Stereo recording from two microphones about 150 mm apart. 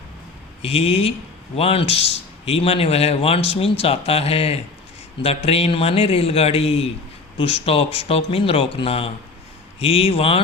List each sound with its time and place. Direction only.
0.6 s speech: 40° left (ahead or behind)